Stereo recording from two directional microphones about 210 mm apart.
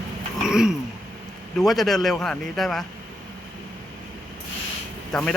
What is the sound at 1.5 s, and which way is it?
Speech, centre (ahead or behind).